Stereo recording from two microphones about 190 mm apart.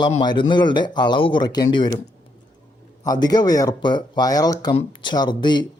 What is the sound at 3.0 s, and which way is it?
Speech, 20° left (ahead or behind).